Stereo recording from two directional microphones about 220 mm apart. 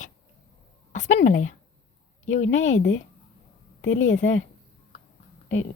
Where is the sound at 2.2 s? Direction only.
30° left (ahead or behind).